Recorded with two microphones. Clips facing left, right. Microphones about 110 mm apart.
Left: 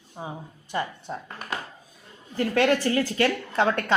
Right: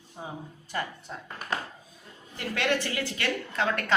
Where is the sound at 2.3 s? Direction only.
40° left (ahead or behind).